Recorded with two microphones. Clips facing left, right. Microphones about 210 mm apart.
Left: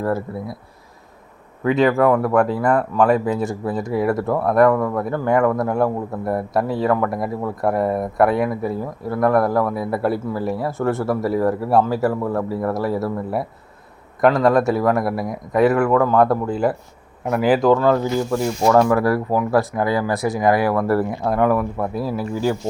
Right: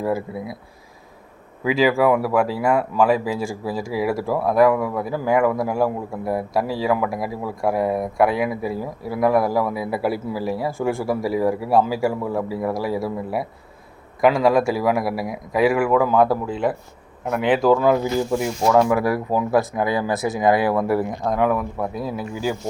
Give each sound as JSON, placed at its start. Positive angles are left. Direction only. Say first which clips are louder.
{"t": 1.6, "sound": "speech", "louder": "left 2 dB", "side_deg": -5}
{"t": 10.9, "sound": "speech", "louder": "left 2 dB", "side_deg": 0}
{"t": 18.9, "sound": "speech", "louder": "left 2 dB", "side_deg": -15}
{"t": 20.8, "sound": "speech", "louder": "left 2 dB", "side_deg": 0}